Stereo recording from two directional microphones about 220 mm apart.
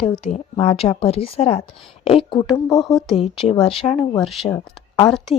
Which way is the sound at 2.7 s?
Centre (ahead or behind).